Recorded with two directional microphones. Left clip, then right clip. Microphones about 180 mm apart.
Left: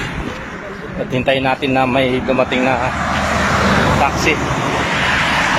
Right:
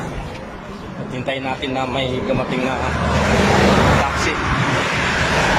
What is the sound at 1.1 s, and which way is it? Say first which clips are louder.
Speech: left 8 dB; 15° left (ahead or behind).